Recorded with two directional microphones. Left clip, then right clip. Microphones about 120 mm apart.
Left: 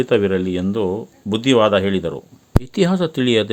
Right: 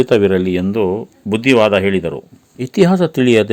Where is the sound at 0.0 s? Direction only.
30° right (ahead or behind).